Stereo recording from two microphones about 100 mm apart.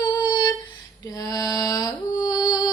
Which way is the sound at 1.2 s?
40° left (ahead or behind).